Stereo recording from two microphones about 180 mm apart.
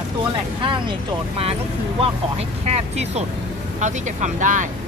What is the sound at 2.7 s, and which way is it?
Speech, 35° right (ahead or behind).